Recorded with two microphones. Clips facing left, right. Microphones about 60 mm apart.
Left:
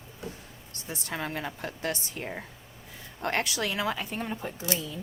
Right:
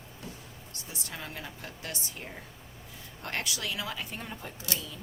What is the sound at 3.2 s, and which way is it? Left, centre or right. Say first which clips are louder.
A woman's voice: left 6 dB; left.